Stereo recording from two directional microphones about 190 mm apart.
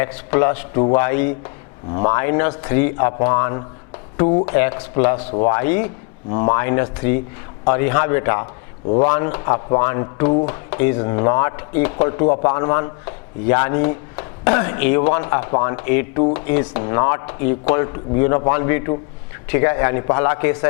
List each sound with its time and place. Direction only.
0.0 s speech: 15° left (ahead or behind)